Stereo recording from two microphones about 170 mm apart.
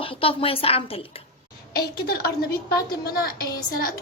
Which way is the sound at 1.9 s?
65° left (ahead or behind).